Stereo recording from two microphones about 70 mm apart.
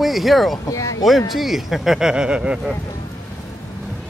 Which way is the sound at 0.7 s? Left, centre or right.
Left.